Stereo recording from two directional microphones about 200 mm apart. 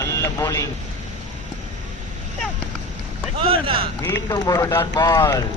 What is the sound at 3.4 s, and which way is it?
Speech, 25° right (ahead or behind).